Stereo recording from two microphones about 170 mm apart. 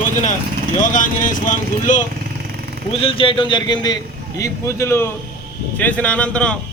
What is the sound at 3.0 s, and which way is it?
A man's voice, 30° left (ahead or behind).